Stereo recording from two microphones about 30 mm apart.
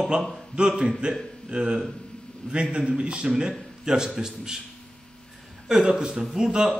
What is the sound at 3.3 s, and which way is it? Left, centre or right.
Speech, right.